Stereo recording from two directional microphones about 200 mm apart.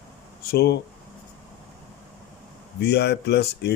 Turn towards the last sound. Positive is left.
turn(degrees=55)  # may be behind; listen again after turning